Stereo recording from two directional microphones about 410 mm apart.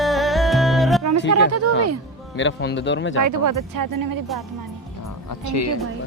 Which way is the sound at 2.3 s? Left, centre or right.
Left.